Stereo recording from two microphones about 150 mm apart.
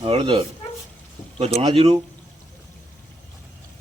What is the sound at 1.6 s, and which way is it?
Speech, 40° right (ahead or behind).